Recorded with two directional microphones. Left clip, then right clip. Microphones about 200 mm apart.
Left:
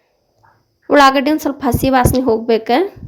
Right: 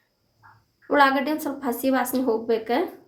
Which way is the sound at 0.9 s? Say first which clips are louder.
Left 9 dB; 45° left (ahead or behind).